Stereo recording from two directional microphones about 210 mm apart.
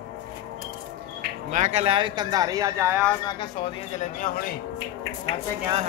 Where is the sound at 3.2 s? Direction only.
25° left (ahead or behind).